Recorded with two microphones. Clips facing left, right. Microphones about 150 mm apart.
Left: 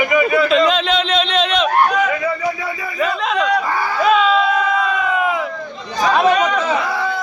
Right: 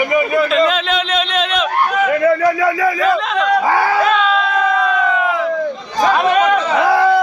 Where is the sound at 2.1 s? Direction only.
65° right (ahead or behind); by 2.9 s 90° right.